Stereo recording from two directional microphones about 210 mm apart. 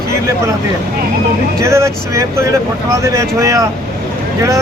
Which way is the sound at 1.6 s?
15° right (ahead or behind).